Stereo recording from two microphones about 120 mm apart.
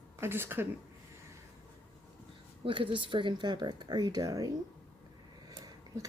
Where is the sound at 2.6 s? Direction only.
45° right (ahead or behind); by 4.5 s 30° right (ahead or behind).